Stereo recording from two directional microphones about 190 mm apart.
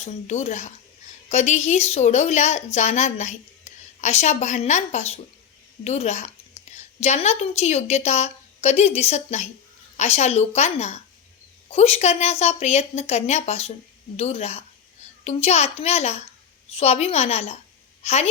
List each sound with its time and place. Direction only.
0.0 s a woman's voice: 35° left (ahead or behind)